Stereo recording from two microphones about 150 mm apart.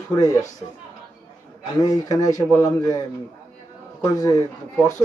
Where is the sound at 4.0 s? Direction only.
25° left (ahead or behind).